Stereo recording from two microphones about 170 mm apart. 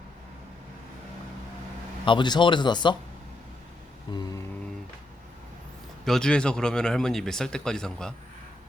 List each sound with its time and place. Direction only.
2.0 s speech: 25° left (ahead or behind)
4.1 s speech: 25° left (ahead or behind)
6.1 s speech: 5° left (ahead or behind)